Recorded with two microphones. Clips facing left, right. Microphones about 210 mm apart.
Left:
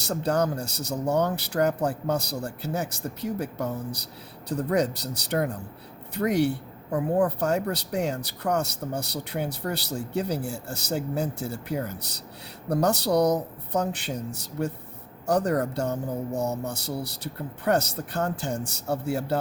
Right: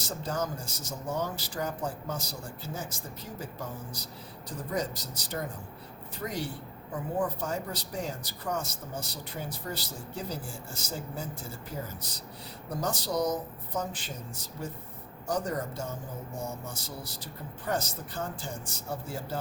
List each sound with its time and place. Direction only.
0.0 s speech: 65° left (ahead or behind)